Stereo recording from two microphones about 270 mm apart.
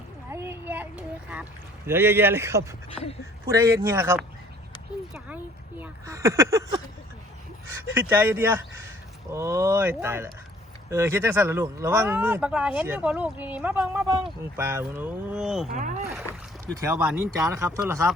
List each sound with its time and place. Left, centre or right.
0.3 s a sound: centre
1.9 s speech: centre
5.8 s speech: centre
7.9 s speech: centre
15.7 s speech: right
16.7 s speech: centre